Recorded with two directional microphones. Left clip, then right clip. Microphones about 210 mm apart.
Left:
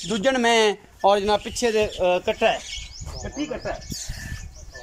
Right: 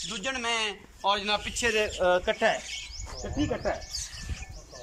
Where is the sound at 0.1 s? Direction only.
40° left (ahead or behind); by 1.9 s 25° left (ahead or behind).